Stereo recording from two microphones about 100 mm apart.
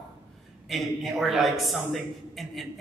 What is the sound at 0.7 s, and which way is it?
A man's voice, centre (ahead or behind).